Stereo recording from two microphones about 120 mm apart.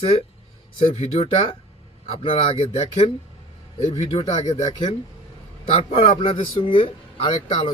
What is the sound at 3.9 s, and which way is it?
Speech, 50° left (ahead or behind).